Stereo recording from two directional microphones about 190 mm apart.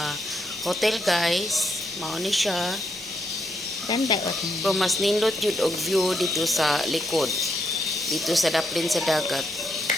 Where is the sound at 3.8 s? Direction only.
25° left (ahead or behind).